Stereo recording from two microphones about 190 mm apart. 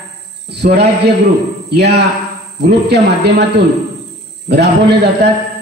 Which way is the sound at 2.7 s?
60° right (ahead or behind).